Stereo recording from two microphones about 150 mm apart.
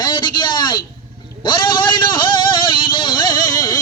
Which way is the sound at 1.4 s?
30° left (ahead or behind).